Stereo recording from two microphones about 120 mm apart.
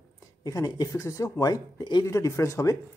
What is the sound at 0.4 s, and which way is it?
Speech, 30° left (ahead or behind).